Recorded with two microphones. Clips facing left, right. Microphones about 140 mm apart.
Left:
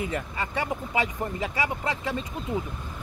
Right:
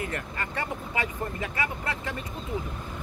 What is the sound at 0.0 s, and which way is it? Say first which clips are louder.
Speech: left 3 dB; 15° left (ahead or behind).